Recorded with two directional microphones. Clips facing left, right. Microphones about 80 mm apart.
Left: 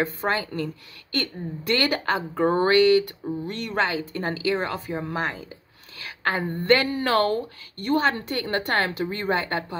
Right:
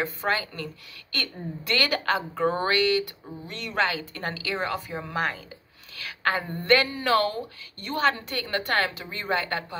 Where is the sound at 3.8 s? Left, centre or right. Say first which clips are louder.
Left 3 dB; left.